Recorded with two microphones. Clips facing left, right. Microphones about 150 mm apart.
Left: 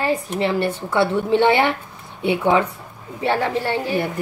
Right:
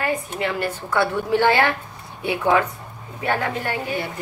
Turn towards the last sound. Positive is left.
turn(degrees=30)  # may be behind; listen again after turning